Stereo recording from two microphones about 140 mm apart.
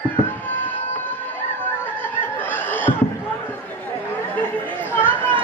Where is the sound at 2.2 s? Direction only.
15° left (ahead or behind).